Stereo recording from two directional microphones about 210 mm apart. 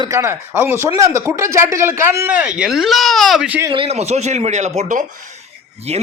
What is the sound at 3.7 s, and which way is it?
Speech, 30° right (ahead or behind).